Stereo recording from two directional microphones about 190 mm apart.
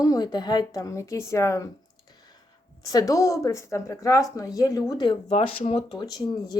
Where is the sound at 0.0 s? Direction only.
20° left (ahead or behind).